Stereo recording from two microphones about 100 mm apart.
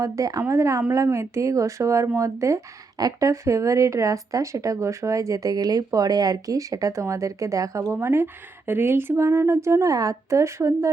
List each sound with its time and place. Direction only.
0.0 s a woman's voice: 35° right (ahead or behind)